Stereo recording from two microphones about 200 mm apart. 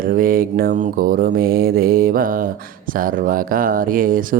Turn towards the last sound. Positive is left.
turn(degrees=-45)  # may be behind; listen again after turning